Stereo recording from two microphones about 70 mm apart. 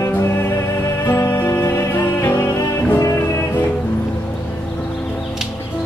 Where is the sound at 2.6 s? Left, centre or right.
Left.